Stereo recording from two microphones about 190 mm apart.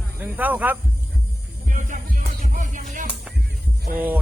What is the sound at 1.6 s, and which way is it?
Music, 40° right (ahead or behind).